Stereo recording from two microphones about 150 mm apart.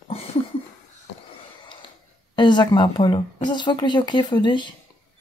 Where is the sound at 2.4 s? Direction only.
30° left (ahead or behind).